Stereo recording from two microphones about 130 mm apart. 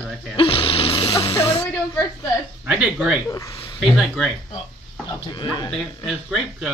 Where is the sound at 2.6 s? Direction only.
10° right (ahead or behind).